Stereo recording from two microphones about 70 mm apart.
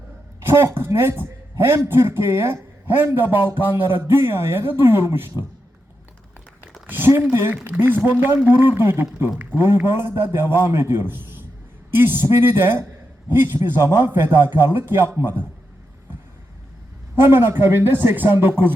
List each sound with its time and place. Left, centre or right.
0.5 s a man's voice: right
6.8 s a sound: right
7.3 s a man's voice: right
17.2 s a man's voice: right